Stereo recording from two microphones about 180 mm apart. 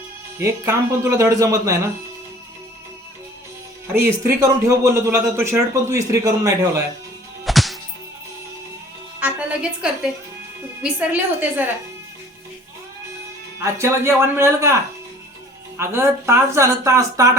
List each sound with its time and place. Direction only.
0.3 s speech: 15° right (ahead or behind)
4.3 s speech: 20° right (ahead or behind)
7.4 s music: centre (ahead or behind)
9.2 s music: 5° right (ahead or behind)
10.8 s speech: 10° right (ahead or behind)
13.6 s speech: 15° right (ahead or behind)
15.8 s speech: 15° right (ahead or behind)